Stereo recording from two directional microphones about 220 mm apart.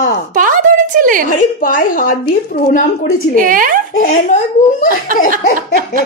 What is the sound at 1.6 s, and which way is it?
A woman's voice, 40° left (ahead or behind).